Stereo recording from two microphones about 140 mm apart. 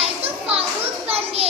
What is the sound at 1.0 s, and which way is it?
Children playing, 45° right (ahead or behind).